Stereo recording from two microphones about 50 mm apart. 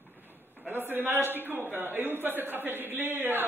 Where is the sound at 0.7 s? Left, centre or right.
Right.